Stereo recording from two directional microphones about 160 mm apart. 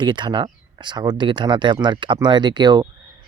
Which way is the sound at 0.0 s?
30° right (ahead or behind).